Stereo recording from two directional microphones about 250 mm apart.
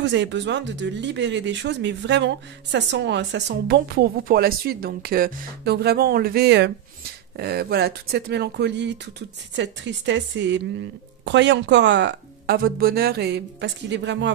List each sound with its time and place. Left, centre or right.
0.0 s speech: right